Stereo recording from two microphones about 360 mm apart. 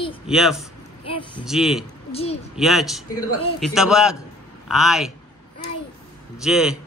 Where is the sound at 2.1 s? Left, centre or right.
Centre.